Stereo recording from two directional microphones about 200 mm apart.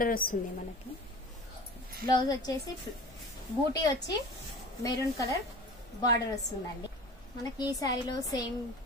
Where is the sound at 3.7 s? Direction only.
20° left (ahead or behind).